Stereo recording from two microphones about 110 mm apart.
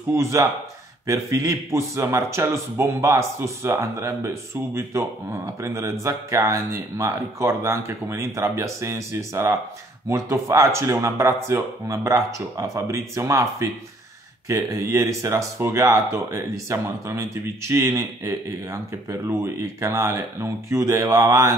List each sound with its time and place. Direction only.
0.1 s speech: 25° right (ahead or behind)